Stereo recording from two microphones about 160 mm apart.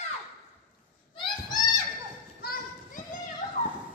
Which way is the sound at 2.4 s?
65° left (ahead or behind).